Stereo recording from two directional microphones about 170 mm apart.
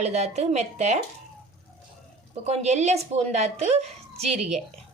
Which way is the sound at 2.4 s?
40° right (ahead or behind).